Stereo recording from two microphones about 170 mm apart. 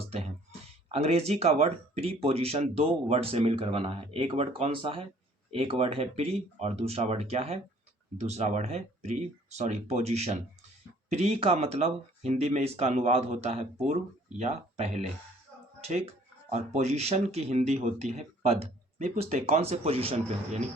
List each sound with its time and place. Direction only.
0.9 s speech: 40° right (ahead or behind)